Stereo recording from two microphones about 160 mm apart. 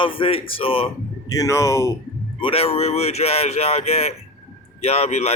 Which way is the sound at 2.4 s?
35° left (ahead or behind).